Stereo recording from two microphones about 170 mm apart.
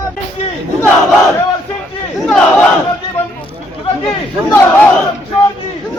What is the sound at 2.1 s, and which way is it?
Battle cry, 5° left (ahead or behind).